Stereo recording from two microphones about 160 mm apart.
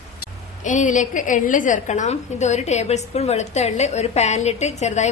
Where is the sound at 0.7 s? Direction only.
50° left (ahead or behind).